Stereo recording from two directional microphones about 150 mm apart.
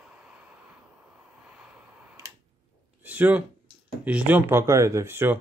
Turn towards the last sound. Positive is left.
turn(degrees=-15)  # may be behind; listen again after turning